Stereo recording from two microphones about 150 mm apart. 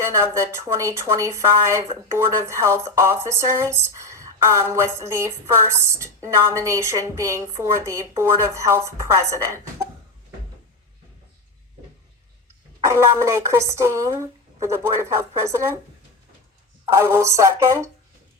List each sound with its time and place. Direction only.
0.0 s speech: 20° right (ahead or behind)
12.8 s speech: 20° right (ahead or behind)
16.9 s speech: 15° right (ahead or behind)